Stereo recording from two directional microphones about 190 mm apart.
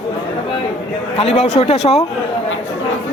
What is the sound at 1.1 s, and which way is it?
Speech, 35° left (ahead or behind).